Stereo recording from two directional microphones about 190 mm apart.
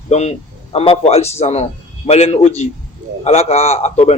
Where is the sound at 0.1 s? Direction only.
35° left (ahead or behind).